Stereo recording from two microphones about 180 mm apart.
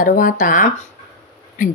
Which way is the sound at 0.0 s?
50° left (ahead or behind).